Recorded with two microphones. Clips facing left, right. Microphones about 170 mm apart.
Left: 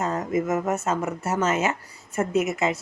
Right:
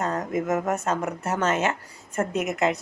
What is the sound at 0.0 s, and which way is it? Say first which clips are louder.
A woman's voice: left 1 dB; 5° left (ahead or behind).